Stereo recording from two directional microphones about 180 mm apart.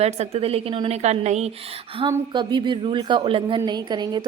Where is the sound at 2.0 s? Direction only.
25° right (ahead or behind).